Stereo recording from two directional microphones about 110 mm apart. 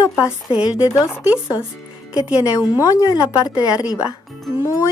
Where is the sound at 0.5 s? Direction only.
10° right (ahead or behind).